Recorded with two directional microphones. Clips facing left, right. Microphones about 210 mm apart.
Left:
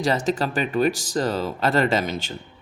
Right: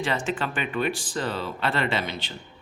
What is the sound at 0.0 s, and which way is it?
Speech, 40° left (ahead or behind).